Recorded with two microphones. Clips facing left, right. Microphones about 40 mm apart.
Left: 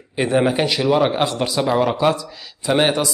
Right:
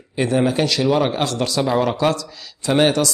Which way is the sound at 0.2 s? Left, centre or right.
Centre.